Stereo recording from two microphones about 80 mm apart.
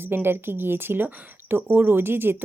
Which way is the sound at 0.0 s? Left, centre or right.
Right.